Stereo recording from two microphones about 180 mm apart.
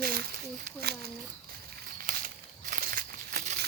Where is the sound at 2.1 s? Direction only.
50° right (ahead or behind).